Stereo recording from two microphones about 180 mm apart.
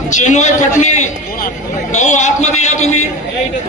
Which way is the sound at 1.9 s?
40° left (ahead or behind).